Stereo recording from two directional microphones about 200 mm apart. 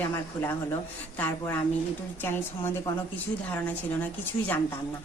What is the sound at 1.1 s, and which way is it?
Speech, 10° left (ahead or behind).